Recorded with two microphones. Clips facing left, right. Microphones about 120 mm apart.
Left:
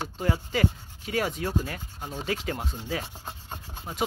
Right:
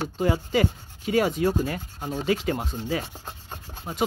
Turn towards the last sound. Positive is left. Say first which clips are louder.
# right 3 dB
turn(degrees=-5)  # may be behind; listen again after turning